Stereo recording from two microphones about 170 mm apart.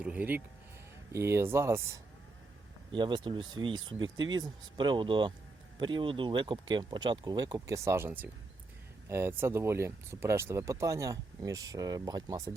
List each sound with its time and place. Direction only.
0.0 s speech: 10° right (ahead or behind)
2.9 s speech: 30° right (ahead or behind)